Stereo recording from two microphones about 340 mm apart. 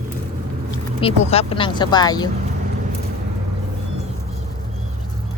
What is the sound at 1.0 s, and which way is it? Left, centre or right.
Speech, centre.